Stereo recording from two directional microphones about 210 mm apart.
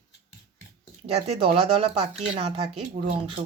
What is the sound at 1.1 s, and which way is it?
Speech, 30° right (ahead or behind).